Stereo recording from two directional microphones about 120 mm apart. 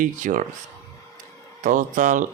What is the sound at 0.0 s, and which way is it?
Speech, 90° right.